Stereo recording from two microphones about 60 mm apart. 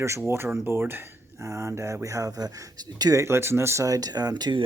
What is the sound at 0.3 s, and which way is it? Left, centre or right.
Speech, right.